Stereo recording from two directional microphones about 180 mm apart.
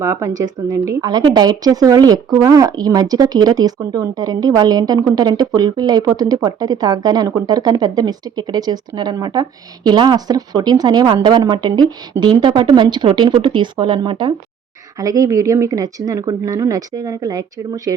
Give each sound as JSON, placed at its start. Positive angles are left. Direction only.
{"t": 0.0, "sound": "speech", "side_deg": -15}